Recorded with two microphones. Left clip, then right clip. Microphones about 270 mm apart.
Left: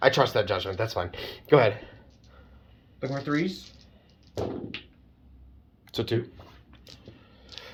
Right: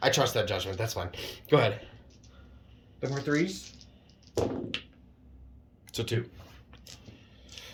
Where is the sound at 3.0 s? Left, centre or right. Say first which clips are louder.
Left 1 dB; centre.